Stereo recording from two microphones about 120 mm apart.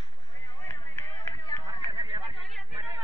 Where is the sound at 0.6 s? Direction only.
15° left (ahead or behind).